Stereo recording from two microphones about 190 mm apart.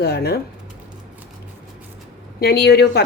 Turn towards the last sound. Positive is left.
turn(degrees=55)  # may be behind; listen again after turning